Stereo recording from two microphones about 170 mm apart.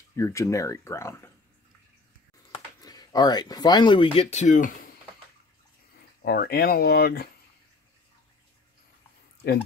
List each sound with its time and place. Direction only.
0.1 s speech: 15° left (ahead or behind)
2.5 s speech: 20° left (ahead or behind); by 4.7 s 50° left (ahead or behind)
6.2 s speech: 70° left (ahead or behind)